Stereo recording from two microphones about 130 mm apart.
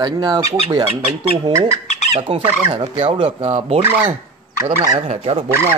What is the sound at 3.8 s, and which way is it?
Speech, 15° right (ahead or behind).